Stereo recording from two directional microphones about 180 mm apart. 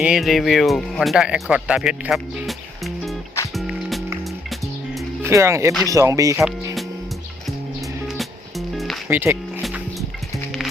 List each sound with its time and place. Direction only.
0.0 s speech: centre (ahead or behind)
3.5 s music: centre (ahead or behind)
5.2 s speech: 15° right (ahead or behind)
8.0 s music: centre (ahead or behind)
9.0 s speech: 10° right (ahead or behind)
9.6 s music: centre (ahead or behind)